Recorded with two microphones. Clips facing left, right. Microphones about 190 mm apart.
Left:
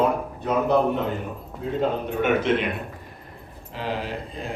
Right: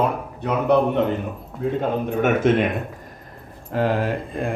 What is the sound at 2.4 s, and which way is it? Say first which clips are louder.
Speech: right 5 dB; 45° right (ahead or behind).